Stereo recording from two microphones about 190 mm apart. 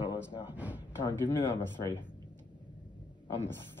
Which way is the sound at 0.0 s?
25° left (ahead or behind).